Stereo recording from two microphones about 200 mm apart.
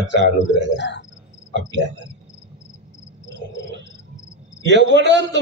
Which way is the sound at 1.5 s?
65° right (ahead or behind).